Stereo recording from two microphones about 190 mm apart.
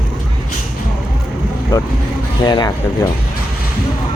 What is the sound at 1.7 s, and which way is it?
Speech, 20° left (ahead or behind).